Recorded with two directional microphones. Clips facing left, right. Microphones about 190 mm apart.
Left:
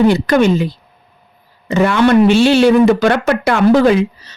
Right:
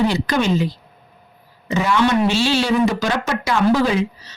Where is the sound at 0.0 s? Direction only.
55° left (ahead or behind).